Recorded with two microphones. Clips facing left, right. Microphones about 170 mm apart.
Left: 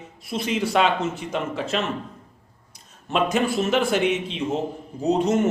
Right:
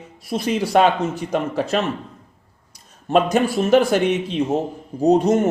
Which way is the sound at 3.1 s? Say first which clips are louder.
Right 5 dB; 40° right (ahead or behind).